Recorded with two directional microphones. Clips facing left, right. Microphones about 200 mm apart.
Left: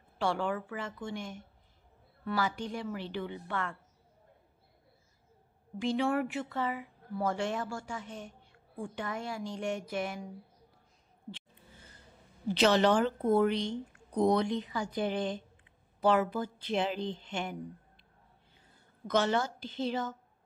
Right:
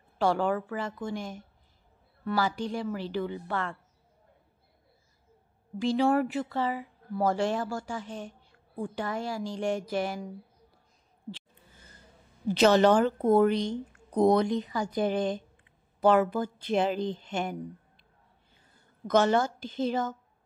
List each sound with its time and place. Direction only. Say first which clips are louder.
0.2 s speech: right 5 dB; 40° right (ahead or behind)
5.8 s speech: right 5 dB; 35° right (ahead or behind)
12.5 s a woman's voice: right 5 dB; 45° right (ahead or behind)
19.0 s a woman's voice: right 5 dB; 45° right (ahead or behind)